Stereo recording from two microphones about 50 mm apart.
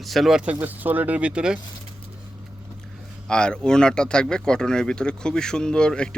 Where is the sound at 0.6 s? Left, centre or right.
Right.